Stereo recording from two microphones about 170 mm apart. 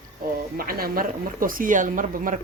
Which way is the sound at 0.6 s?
60° right (ahead or behind).